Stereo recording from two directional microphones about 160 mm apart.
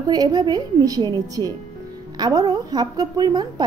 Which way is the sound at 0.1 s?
25° right (ahead or behind).